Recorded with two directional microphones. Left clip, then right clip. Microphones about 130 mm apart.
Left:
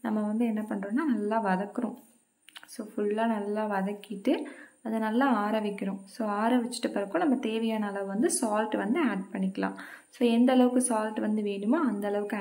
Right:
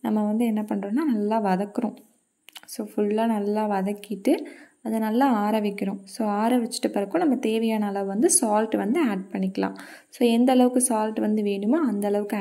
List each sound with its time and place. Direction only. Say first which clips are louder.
0.0 s speech: right 5 dB; 30° right (ahead or behind)